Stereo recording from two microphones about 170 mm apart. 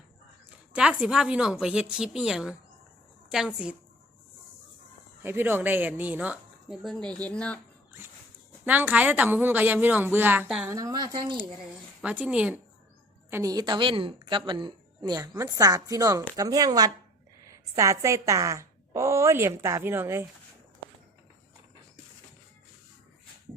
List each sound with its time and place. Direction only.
0.7 s a woman's voice: 5° right (ahead or behind)
5.2 s a woman's voice: 15° right (ahead or behind); by 7.6 s 5° left (ahead or behind)
8.6 s a woman's voice: 10° right (ahead or behind)
10.7 s a woman's voice: 20° right (ahead or behind)
12.0 s a woman's voice: 5° right (ahead or behind)
13.3 s a woman's voice: 20° right (ahead or behind)